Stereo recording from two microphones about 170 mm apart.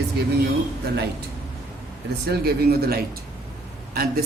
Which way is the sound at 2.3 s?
65° right (ahead or behind).